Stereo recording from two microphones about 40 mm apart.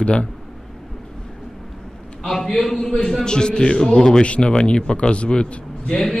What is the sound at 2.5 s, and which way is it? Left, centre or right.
Speech, centre.